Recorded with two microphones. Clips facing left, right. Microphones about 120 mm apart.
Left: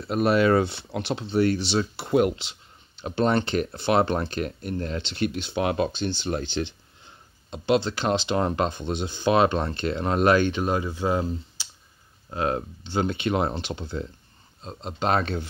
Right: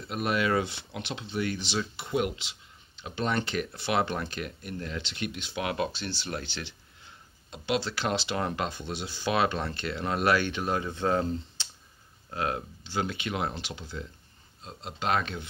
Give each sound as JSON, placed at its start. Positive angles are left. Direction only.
{"t": 0.1, "sound": "speech", "side_deg": 40}
{"t": 5.9, "sound": "speech", "side_deg": 20}
{"t": 10.9, "sound": "speech", "side_deg": 10}
{"t": 12.3, "sound": "speech", "side_deg": 30}